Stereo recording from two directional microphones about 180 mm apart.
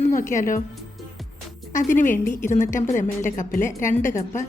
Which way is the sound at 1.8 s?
45° left (ahead or behind).